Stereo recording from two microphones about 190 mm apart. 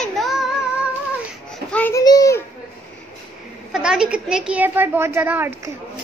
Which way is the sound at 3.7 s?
5° right (ahead or behind).